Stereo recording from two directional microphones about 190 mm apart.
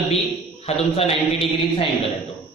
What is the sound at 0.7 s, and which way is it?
Speech, 30° left (ahead or behind).